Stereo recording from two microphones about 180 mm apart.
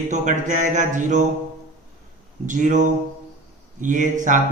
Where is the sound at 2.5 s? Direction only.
45° right (ahead or behind).